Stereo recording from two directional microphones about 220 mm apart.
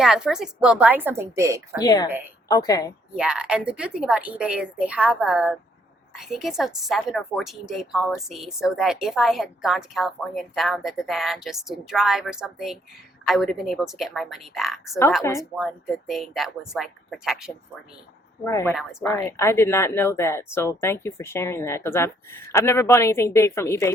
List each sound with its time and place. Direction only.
0.0 s a woman's voice: centre (ahead or behind)
1.8 s speech: 15° left (ahead or behind)
3.2 s a woman's voice: 5° right (ahead or behind)
15.2 s speech: 15° left (ahead or behind)
15.5 s a woman's voice: centre (ahead or behind)
18.4 s speech: 15° left (ahead or behind)
18.7 s a woman's voice: centre (ahead or behind)
19.0 s speech: 10° left (ahead or behind)